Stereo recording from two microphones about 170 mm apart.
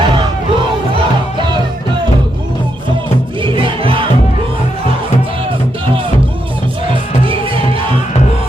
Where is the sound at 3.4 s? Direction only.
30° right (ahead or behind).